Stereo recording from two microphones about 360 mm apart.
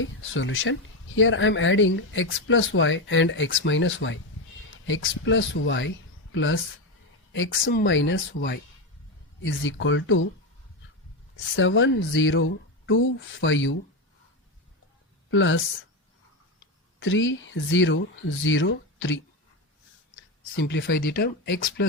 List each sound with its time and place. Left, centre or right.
0.0 s speech: left
11.5 s speech: left
15.3 s speech: left
17.0 s speech: left